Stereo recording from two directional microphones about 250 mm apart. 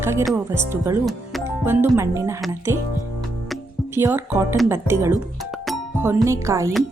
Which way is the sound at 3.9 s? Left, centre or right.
Centre.